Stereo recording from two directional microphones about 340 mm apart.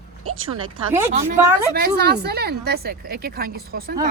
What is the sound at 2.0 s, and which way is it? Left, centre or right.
A woman's voice, right.